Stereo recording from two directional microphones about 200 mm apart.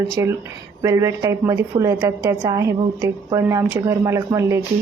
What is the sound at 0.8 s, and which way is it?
A woman's voice, 15° right (ahead or behind).